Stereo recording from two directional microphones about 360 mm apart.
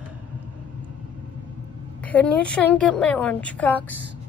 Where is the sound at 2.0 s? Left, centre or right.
Centre.